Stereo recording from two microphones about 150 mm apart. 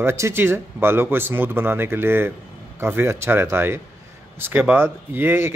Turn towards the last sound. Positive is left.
turn(degrees=-15)  # may be behind; listen again after turning